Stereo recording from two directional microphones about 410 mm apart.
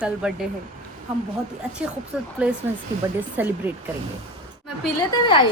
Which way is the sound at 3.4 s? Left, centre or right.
Centre.